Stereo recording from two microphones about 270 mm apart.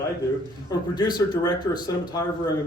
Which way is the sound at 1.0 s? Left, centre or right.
Centre.